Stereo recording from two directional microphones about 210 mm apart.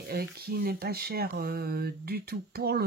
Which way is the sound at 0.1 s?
45° right (ahead or behind).